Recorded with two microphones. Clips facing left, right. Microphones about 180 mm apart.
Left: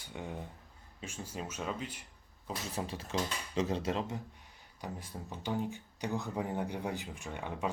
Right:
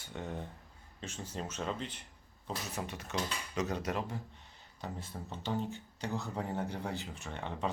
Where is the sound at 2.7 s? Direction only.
30° left (ahead or behind).